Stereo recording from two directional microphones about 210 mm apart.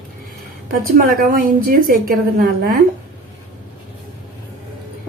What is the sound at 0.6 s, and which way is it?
A woman's voice, 45° right (ahead or behind).